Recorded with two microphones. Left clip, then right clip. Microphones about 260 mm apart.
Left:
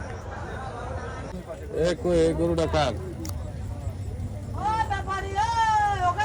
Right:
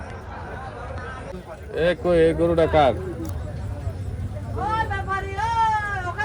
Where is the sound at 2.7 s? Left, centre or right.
Centre.